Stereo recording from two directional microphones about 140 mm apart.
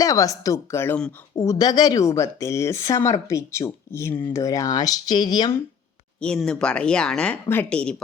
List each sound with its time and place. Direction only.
0.0 s speech: 25° left (ahead or behind)
6.1 s speech: 5° left (ahead or behind)